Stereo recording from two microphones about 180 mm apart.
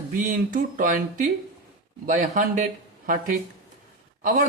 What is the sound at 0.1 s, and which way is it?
Speech, 45° right (ahead or behind).